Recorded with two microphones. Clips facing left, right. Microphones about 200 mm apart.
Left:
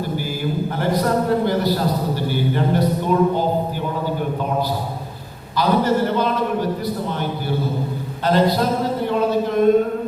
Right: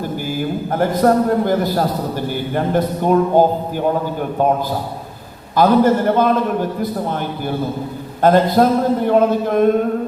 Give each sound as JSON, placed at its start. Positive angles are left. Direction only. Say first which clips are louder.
{"t": 0.7, "sound": "a man's voice", "louder": "right 6 dB", "side_deg": -50}
{"t": 5.5, "sound": "a man's voice", "louder": "right 5 dB", "side_deg": -50}